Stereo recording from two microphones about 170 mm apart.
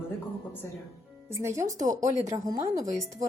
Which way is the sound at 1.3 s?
15° right (ahead or behind).